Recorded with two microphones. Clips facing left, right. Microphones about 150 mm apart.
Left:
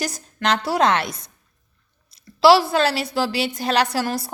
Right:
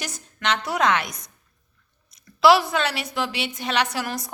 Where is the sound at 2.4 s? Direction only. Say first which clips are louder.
Left 3 dB; 30° left (ahead or behind).